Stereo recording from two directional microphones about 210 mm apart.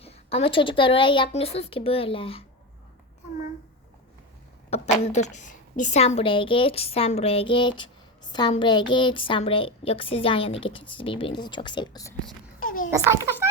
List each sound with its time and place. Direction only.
0.0 s a woman's voice: 30° left (ahead or behind)
4.7 s a woman's voice: 30° left (ahead or behind)
12.5 s a sound: 40° left (ahead or behind)
12.9 s a child's voice: 10° right (ahead or behind)